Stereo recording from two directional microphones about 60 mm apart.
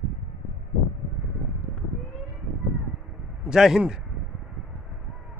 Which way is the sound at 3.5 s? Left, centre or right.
Centre.